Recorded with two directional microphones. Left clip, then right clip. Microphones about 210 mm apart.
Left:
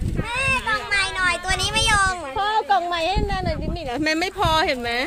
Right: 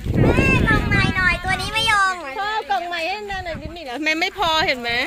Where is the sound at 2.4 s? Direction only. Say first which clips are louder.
Left 4 dB; 20° left (ahead or behind).